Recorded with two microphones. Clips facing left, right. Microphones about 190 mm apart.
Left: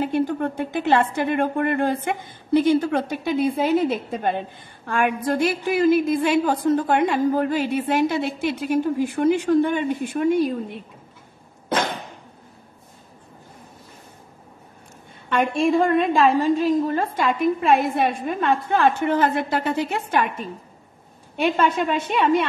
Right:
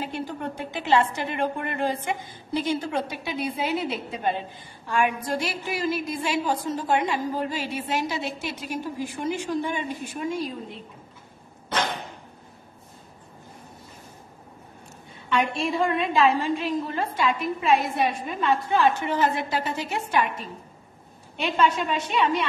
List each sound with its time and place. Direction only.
0.0 s a woman's voice: 50° left (ahead or behind)
15.2 s a woman's voice: 50° left (ahead or behind)